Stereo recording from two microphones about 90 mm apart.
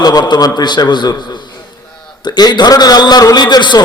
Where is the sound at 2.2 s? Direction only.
50° left (ahead or behind).